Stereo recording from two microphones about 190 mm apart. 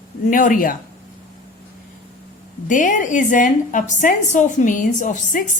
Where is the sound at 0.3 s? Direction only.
45° left (ahead or behind).